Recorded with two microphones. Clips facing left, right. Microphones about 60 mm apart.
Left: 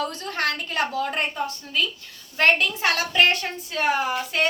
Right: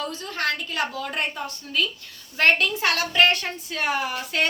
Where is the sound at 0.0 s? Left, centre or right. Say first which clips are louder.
Left 2 dB; left.